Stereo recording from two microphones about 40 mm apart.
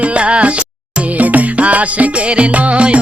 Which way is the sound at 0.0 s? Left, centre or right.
Right.